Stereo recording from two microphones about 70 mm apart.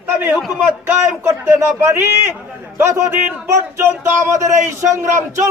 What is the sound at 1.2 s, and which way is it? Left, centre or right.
A man's voice, right.